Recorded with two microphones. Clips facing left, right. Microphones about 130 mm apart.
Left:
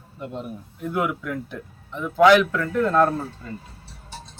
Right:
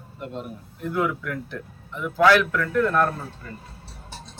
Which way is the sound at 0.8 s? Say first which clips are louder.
Even; 15° left (ahead or behind).